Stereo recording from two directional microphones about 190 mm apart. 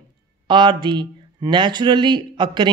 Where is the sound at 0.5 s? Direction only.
25° right (ahead or behind).